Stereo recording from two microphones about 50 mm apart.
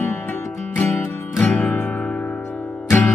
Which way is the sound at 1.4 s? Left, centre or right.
Left.